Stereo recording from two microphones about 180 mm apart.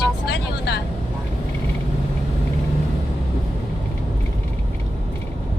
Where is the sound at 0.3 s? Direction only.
65° left (ahead or behind).